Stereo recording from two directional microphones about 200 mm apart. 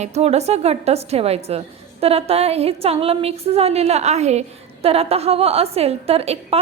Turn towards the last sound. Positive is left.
turn(degrees=-30)  # may be behind; listen again after turning